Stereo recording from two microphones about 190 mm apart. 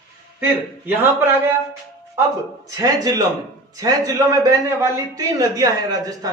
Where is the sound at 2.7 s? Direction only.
20° right (ahead or behind).